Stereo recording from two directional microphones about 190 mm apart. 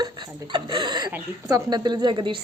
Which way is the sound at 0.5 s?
25° right (ahead or behind).